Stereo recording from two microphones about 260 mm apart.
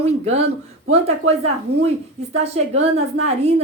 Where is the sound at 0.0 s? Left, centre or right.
Right.